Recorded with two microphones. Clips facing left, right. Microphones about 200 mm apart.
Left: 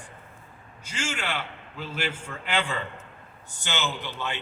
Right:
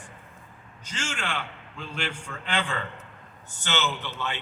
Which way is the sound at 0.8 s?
10° left (ahead or behind).